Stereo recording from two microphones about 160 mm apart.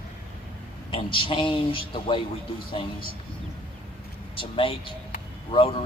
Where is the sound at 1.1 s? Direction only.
30° left (ahead or behind).